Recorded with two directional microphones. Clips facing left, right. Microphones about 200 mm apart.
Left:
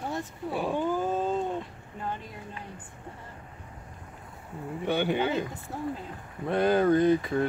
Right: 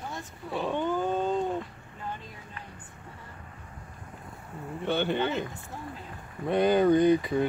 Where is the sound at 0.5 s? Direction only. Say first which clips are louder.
Even; 5° left (ahead or behind).